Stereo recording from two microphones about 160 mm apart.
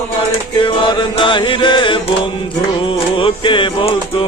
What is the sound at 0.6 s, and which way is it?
Music, 30° left (ahead or behind).